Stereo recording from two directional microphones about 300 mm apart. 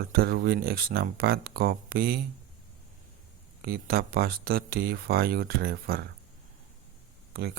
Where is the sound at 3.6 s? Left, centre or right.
Right.